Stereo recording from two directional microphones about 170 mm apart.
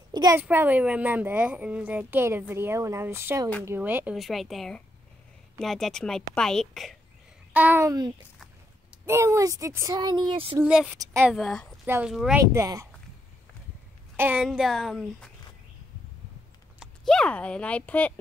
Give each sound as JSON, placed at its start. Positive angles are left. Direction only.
{"t": 0.1, "sound": "a woman's voice", "side_deg": -25}
{"t": 0.4, "sound": "a woman's voice", "side_deg": -10}
{"t": 7.5, "sound": "speech", "side_deg": -10}
{"t": 10.6, "sound": "a woman's voice", "side_deg": -5}
{"t": 11.3, "sound": "a woman's voice", "side_deg": 0}
{"t": 12.4, "sound": "speech", "side_deg": -15}
{"t": 14.1, "sound": "a woman's voice", "side_deg": -10}
{"t": 16.8, "sound": "speech", "side_deg": 0}